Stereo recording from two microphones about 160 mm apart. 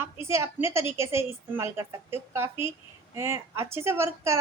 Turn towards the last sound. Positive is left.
turn(degrees=-15)  # may be behind; listen again after turning